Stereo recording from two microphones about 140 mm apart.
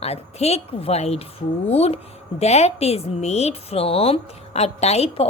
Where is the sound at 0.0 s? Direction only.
50° left (ahead or behind).